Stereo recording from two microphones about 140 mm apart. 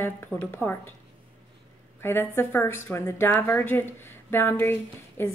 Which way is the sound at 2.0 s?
15° left (ahead or behind).